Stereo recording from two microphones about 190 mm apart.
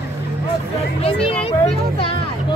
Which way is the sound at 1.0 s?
30° left (ahead or behind).